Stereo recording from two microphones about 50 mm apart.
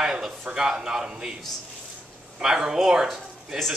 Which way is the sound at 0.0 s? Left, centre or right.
Centre.